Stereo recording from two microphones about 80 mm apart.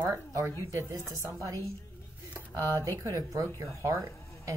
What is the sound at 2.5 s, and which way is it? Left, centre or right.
Speech, right.